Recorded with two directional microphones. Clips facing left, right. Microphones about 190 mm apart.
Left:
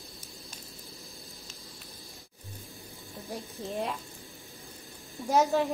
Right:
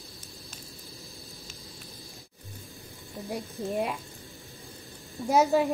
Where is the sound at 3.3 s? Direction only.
10° right (ahead or behind).